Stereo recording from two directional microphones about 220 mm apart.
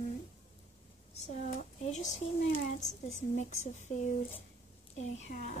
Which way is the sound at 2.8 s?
35° left (ahead or behind).